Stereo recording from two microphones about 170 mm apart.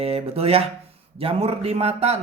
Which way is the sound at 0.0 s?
35° right (ahead or behind).